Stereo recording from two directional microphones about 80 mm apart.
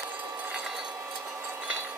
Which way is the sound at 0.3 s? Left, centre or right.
Centre.